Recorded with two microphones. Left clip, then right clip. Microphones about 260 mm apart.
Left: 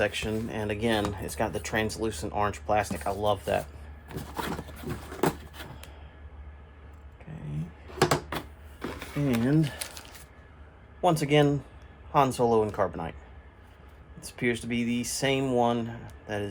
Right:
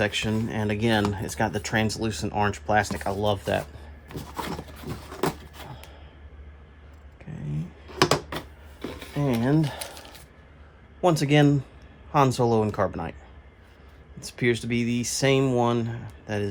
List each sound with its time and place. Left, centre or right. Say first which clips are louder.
0.0 s speech: right 2 dB; right
4.1 s a sound: right 1 dB; centre
8.3 s power windows: right 1 dB; centre
9.4 s speech: right 2 dB; right
9.7 s a sound: right 3 dB; centre
11.0 s speech: right 2 dB; right
14.3 s speech: right 4 dB; right